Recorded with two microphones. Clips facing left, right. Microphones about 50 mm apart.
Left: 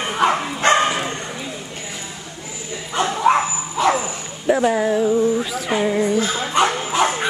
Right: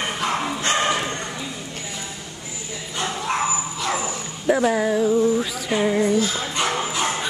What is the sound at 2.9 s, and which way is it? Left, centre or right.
Bow-wow, left.